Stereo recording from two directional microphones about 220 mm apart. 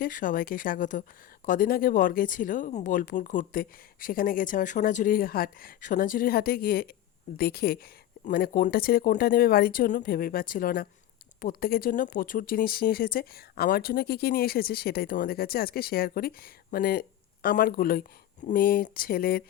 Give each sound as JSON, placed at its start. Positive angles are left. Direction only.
{"t": 0.0, "sound": "speech", "side_deg": 35}